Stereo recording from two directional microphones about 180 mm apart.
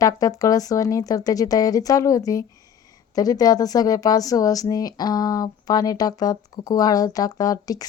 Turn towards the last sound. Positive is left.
turn(degrees=20)  # may be behind; listen again after turning